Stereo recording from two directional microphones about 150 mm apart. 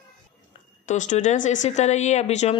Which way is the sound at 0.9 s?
55° left (ahead or behind).